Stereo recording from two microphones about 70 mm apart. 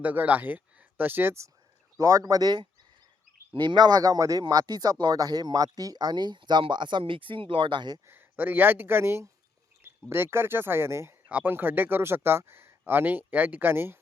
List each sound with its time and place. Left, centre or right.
0.0 s speech: right
2.0 s speech: right
4.2 s speech: right
8.0 s speech: right
11.3 s speech: right